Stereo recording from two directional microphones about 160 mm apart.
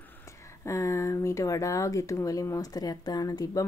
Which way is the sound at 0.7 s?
20° left (ahead or behind).